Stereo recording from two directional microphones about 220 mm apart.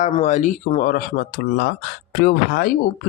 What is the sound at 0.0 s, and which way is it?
Speech, 30° left (ahead or behind).